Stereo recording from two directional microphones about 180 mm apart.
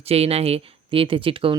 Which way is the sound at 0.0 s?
35° right (ahead or behind).